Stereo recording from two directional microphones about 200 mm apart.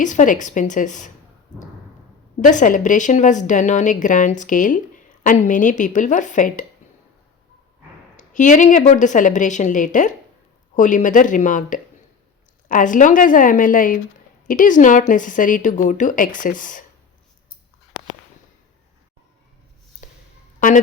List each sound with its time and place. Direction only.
0.0 s speech: 40° left (ahead or behind)
2.5 s speech: 40° left (ahead or behind)
8.1 s speech: 40° left (ahead or behind)
20.0 s music: 40° left (ahead or behind)